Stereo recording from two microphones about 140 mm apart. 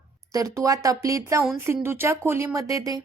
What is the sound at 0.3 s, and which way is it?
A woman's voice, 25° right (ahead or behind).